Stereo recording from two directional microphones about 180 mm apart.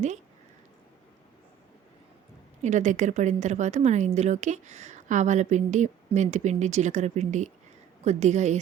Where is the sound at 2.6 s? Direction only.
40° right (ahead or behind).